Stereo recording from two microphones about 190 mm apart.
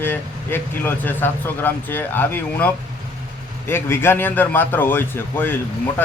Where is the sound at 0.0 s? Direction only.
10° left (ahead or behind).